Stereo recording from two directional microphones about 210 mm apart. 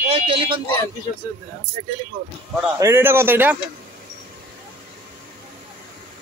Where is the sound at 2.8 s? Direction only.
10° right (ahead or behind).